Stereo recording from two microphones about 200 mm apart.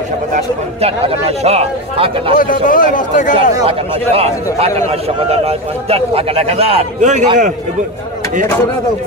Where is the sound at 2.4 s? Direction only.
45° left (ahead or behind).